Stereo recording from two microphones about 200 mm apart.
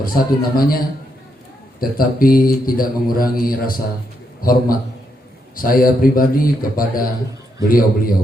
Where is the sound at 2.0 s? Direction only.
45° left (ahead or behind).